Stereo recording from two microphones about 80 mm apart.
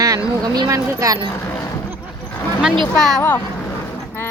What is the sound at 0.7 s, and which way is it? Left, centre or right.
Speech, right.